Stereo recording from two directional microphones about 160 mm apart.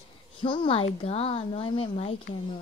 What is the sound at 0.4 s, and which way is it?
Speech, 30° left (ahead or behind).